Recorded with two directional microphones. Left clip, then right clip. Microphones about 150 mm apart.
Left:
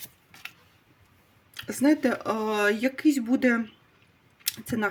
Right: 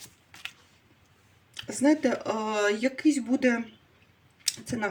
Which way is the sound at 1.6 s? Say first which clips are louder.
Left 1 dB; 45° left (ahead or behind).